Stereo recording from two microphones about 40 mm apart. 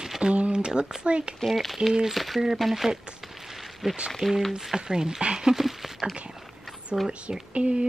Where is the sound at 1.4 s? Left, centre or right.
Centre.